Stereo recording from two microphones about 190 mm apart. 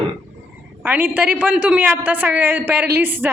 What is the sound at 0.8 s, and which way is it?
A man's voice, 10° right (ahead or behind).